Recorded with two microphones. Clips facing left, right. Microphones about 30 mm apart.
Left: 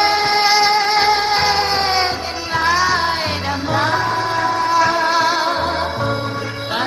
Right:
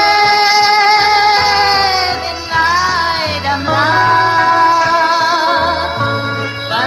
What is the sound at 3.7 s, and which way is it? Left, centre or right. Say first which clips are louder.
Music: right 7 dB; right.